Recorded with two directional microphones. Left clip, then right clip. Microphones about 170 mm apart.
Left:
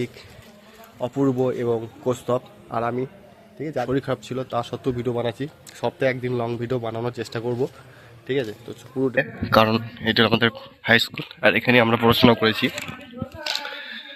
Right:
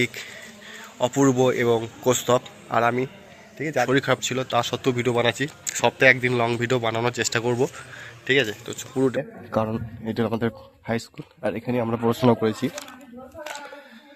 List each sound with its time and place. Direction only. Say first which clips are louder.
0.9 s a man's voice: right 3 dB; 5° right (ahead or behind)
12.0 s speech: left 4 dB; 15° right (ahead or behind)